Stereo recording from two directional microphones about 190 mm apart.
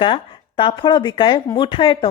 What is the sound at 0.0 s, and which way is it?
Speech, 25° left (ahead or behind).